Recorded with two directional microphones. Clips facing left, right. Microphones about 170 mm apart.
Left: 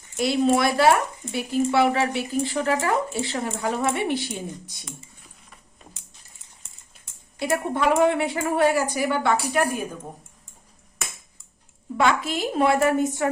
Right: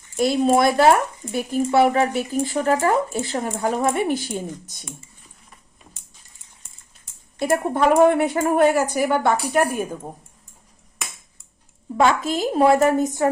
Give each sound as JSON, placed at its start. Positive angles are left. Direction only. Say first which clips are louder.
{"t": 0.2, "sound": "speech", "louder": "right 3 dB", "side_deg": -45}
{"t": 6.6, "sound": "speech", "louder": "even", "side_deg": -35}
{"t": 11.9, "sound": "speech", "louder": "right 3 dB", "side_deg": -40}